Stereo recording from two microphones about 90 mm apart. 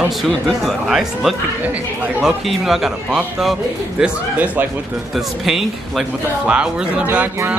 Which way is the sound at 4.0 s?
15° right (ahead or behind).